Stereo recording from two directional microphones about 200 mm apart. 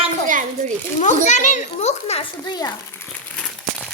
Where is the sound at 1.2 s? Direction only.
35° left (ahead or behind).